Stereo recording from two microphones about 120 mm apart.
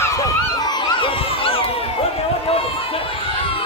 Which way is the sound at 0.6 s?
35° left (ahead or behind).